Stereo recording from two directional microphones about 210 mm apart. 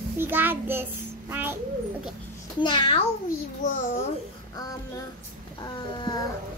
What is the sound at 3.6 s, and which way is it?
Speech, 40° left (ahead or behind).